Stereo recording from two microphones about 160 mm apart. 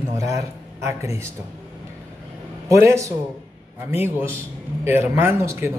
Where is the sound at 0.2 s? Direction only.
20° right (ahead or behind).